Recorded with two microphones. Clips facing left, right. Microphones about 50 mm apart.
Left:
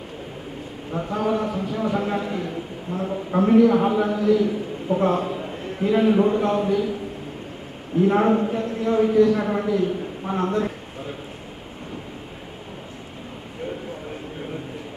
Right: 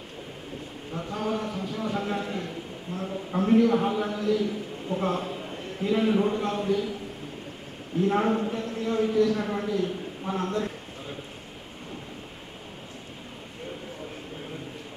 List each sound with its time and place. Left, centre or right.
0.9 s a man's voice: left
8.0 s a man's voice: centre